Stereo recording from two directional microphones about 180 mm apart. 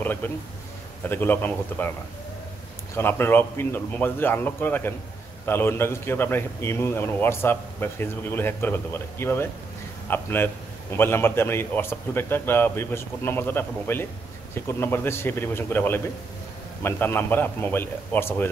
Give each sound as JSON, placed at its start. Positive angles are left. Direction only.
{"t": 0.0, "sound": "a man's voice", "side_deg": 10}
{"t": 3.0, "sound": "a man's voice", "side_deg": 10}